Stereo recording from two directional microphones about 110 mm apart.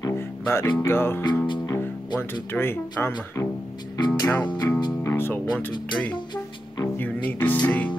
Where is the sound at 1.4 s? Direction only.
45° left (ahead or behind).